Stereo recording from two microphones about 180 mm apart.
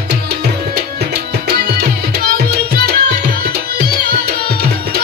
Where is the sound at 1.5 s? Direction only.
60° right (ahead or behind).